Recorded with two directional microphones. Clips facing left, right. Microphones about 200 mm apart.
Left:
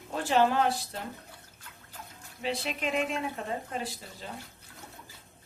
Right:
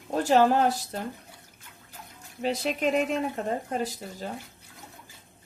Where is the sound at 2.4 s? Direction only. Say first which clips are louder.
Right 6 dB; 40° right (ahead or behind).